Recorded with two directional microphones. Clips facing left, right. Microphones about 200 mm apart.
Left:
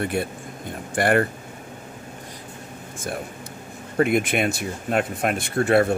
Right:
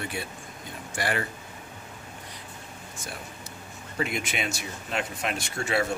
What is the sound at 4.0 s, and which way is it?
Speech, 55° left (ahead or behind).